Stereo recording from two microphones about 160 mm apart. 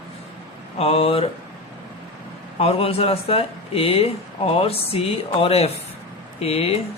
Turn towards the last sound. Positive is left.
turn(degrees=40)  # may be behind; listen again after turning